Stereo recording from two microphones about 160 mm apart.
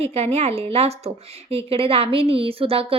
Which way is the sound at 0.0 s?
40° right (ahead or behind).